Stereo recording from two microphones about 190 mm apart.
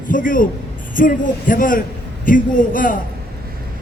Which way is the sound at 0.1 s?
45° left (ahead or behind).